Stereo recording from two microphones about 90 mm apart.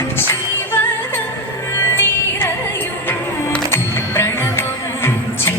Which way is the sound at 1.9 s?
25° left (ahead or behind).